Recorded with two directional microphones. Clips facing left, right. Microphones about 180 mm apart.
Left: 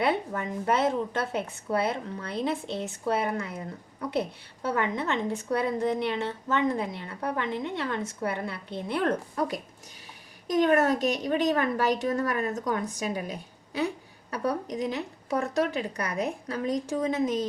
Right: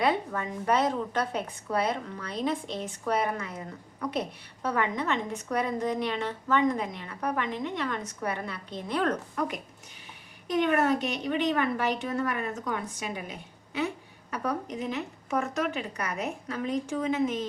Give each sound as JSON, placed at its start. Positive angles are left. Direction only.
{"t": 0.0, "sound": "a woman's voice", "side_deg": 25}
{"t": 4.6, "sound": "a woman's voice", "side_deg": 25}